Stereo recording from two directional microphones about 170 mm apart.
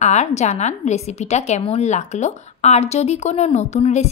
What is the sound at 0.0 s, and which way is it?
A woman's voice, 40° left (ahead or behind).